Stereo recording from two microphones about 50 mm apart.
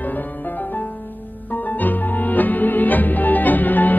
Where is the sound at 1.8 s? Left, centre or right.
Left.